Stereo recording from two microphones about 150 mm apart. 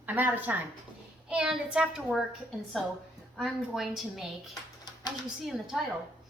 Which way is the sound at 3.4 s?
Centre (ahead or behind).